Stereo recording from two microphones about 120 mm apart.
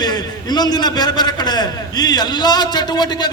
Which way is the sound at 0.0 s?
35° left (ahead or behind).